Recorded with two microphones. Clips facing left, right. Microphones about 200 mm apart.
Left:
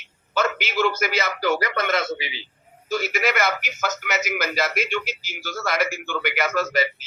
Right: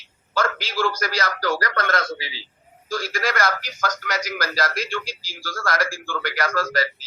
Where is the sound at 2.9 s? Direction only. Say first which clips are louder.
Left 2 dB; 25° left (ahead or behind).